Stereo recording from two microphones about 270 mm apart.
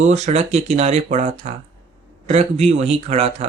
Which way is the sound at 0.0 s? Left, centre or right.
Right.